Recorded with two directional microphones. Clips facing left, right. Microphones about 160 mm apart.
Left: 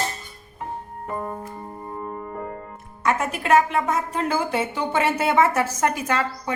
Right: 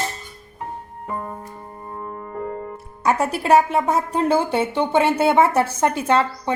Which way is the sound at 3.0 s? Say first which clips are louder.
Right 4 dB; 35° right (ahead or behind).